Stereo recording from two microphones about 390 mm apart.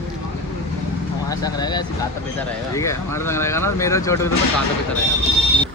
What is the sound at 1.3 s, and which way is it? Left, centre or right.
Speech, centre.